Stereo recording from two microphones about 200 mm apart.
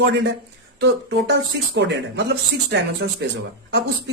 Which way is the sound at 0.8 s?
60° right (ahead or behind).